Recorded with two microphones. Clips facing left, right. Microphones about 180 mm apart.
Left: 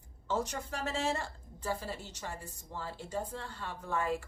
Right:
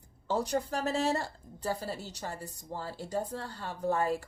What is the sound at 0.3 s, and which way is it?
A woman's voice, 35° right (ahead or behind).